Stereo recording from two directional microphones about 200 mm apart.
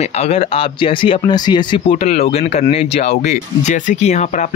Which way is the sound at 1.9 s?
35° left (ahead or behind).